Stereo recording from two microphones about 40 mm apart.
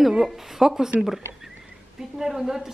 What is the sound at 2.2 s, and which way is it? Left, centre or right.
Speech, centre.